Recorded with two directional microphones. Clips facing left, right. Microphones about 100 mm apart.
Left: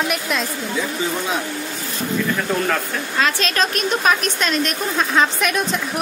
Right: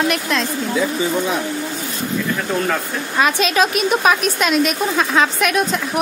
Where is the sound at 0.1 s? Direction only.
5° left (ahead or behind).